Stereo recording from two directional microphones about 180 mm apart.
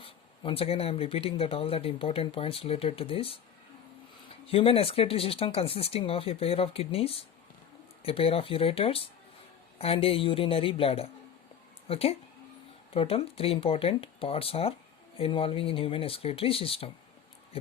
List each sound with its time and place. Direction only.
0.0 s speech: 30° left (ahead or behind)